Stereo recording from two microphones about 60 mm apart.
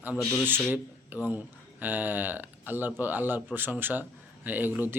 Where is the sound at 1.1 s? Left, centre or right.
Right.